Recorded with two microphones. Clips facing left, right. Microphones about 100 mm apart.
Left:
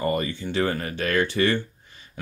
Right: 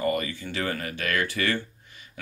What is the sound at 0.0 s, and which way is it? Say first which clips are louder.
Speech: left 2 dB; 30° left (ahead or behind).